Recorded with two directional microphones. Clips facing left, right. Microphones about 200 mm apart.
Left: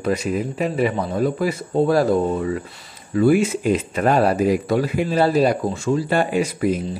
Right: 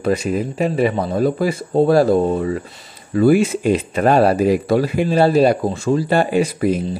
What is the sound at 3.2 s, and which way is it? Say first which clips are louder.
Speech: right 3 dB; 35° right (ahead or behind).